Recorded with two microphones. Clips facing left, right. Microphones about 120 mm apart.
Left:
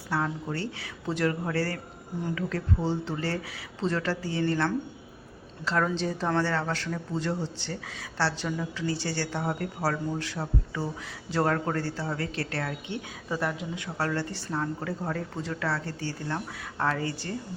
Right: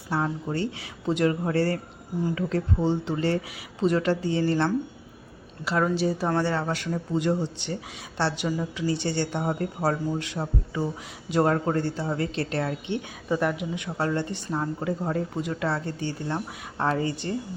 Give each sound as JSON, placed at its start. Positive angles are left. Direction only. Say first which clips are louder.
{"t": 0.1, "sound": "a woman's voice", "louder": "right 3 dB", "side_deg": -20}
{"t": 5.6, "sound": "a woman's voice", "louder": "right 3 dB", "side_deg": -10}